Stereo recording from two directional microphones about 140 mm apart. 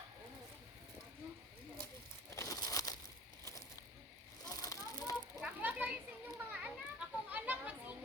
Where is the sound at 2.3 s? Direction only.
20° left (ahead or behind).